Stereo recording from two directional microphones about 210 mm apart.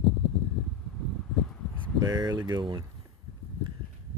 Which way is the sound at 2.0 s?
20° right (ahead or behind).